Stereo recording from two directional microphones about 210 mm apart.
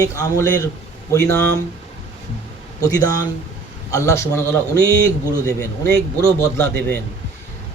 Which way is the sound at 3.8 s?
15° left (ahead or behind).